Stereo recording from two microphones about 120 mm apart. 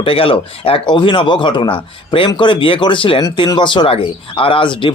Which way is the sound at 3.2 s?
35° left (ahead or behind).